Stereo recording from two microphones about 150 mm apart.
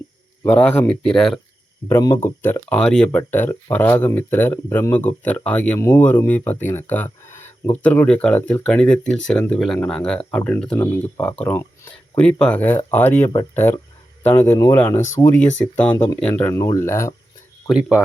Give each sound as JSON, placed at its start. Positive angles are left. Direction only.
{"t": 0.4, "sound": "speech", "side_deg": 10}
{"t": 1.9, "sound": "speech", "side_deg": 20}
{"t": 2.4, "sound": "speech", "side_deg": 10}
{"t": 16.6, "sound": "speech", "side_deg": 20}
{"t": 17.7, "sound": "speech", "side_deg": -5}